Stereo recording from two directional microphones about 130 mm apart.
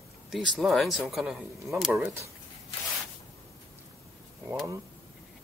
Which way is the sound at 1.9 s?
20° right (ahead or behind).